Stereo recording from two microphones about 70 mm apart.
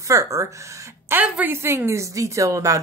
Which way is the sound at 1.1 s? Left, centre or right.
Right.